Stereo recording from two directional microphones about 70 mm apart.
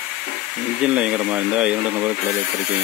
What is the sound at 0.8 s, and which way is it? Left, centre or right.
Speech, centre.